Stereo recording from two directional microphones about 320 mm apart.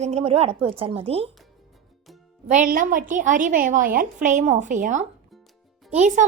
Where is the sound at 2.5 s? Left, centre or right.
Right.